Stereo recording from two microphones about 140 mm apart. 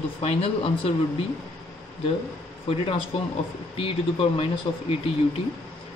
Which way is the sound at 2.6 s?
40° left (ahead or behind).